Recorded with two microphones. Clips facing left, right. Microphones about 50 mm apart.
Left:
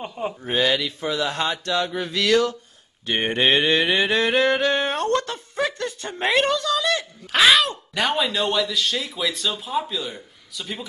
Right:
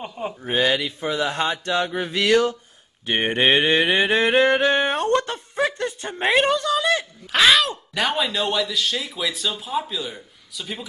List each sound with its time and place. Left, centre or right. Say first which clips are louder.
0.0 s a man's voice: left 1 dB; centre
0.7 s mantra: right 1 dB; centre
1.6 s a sound: right 1 dB; right
3.1 s mantra: right 1 dB; centre
5.6 s music: right 2 dB; centre
6.3 s mantra: right 2 dB; centre
7.3 s a man's voice: even; centre